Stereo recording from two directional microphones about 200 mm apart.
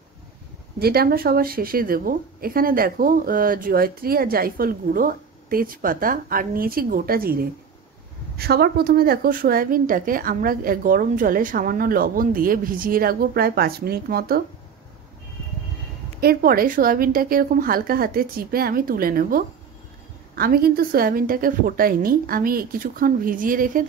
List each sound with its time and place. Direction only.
0.7 s speech: 50° right (ahead or behind)
16.2 s speech: 50° right (ahead or behind)